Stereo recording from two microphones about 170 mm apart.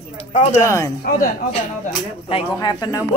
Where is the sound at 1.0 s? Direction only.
60° left (ahead or behind).